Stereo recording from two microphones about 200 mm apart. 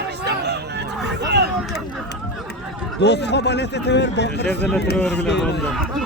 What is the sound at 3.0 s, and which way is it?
A man's voice, 55° left (ahead or behind).